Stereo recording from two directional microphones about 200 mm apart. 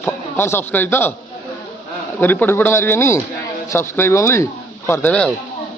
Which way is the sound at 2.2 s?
10° left (ahead or behind).